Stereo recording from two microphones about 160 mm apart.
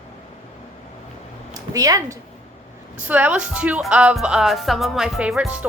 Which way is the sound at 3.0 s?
10° right (ahead or behind).